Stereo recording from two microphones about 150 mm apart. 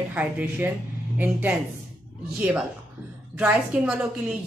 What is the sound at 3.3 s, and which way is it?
Speech, 15° right (ahead or behind).